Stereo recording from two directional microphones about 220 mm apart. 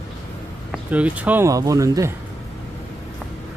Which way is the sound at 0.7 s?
5° right (ahead or behind).